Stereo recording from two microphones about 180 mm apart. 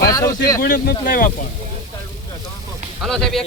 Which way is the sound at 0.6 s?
55° left (ahead or behind).